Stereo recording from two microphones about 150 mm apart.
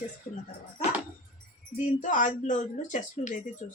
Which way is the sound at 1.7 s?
60° left (ahead or behind).